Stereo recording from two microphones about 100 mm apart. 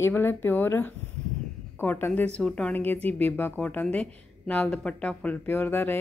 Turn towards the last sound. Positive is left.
turn(degrees=20)  # may be behind; listen again after turning